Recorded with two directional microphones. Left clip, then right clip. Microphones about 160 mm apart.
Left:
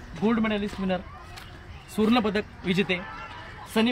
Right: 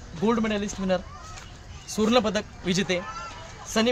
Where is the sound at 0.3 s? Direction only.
30° right (ahead or behind).